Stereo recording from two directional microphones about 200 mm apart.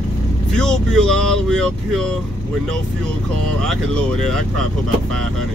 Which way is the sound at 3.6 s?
5° left (ahead or behind).